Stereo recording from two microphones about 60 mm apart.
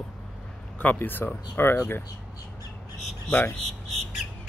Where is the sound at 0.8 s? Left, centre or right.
Left.